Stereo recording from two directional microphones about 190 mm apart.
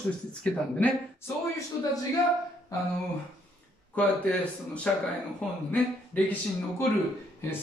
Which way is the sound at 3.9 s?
5° left (ahead or behind).